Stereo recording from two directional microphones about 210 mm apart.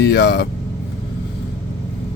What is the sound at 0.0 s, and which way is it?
Speech, 55° left (ahead or behind).